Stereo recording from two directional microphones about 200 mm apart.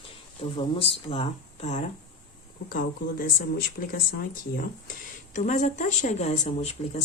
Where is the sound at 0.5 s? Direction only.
25° left (ahead or behind).